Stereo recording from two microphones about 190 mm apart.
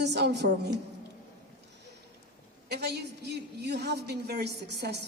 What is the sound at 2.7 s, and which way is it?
A woman's voice, 60° right (ahead or behind).